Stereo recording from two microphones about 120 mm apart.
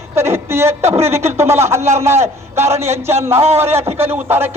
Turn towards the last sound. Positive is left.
turn(degrees=-20)  # may be behind; listen again after turning